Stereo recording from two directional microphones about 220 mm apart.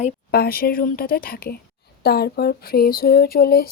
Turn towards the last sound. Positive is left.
turn(degrees=45)  # may be behind; listen again after turning